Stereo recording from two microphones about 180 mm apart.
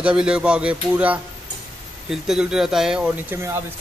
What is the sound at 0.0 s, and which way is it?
A man's voice, 5° right (ahead or behind).